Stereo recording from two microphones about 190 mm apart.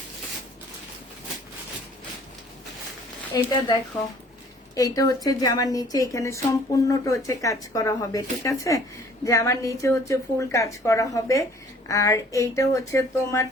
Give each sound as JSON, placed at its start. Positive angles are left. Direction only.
{"t": 3.3, "sound": "a woman's voice", "side_deg": 20}